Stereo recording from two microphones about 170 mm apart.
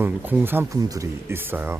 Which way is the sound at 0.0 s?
10° right (ahead or behind).